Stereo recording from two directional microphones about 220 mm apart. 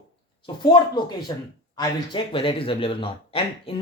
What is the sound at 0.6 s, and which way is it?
Speech, 20° left (ahead or behind).